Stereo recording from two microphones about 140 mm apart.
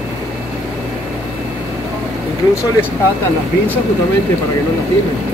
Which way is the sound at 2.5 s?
15° left (ahead or behind).